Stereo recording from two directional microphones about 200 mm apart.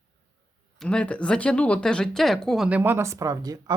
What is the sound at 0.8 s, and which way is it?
Speech, 5° left (ahead or behind).